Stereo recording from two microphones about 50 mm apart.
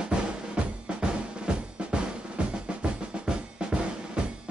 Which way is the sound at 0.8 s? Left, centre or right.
Centre.